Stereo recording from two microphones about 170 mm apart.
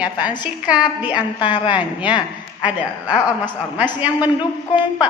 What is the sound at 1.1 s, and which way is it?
Speech, 30° left (ahead or behind).